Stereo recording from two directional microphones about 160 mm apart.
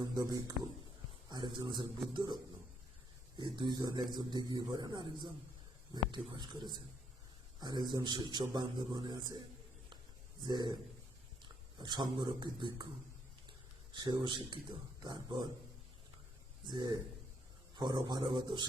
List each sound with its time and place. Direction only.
0.0 s a man's voice: 25° right (ahead or behind)
10.4 s a man's voice: 25° right (ahead or behind)
13.9 s a man's voice: 30° right (ahead or behind)
16.6 s a man's voice: 25° right (ahead or behind)